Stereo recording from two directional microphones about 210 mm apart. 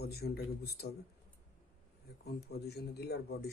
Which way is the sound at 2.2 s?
50° left (ahead or behind).